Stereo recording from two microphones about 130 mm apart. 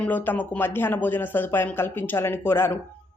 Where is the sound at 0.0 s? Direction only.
15° left (ahead or behind).